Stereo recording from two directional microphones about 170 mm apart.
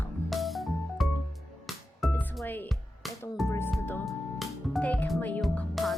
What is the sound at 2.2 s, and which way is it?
Music, 10° left (ahead or behind).